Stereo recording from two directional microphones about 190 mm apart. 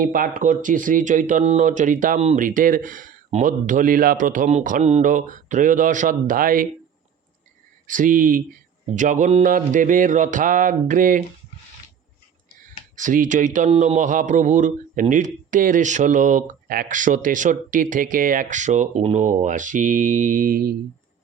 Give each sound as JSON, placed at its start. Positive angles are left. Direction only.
{"t": 0.0, "sound": "speech", "side_deg": -45}
{"t": 7.9, "sound": "speech", "side_deg": -45}
{"t": 13.0, "sound": "speech", "side_deg": -45}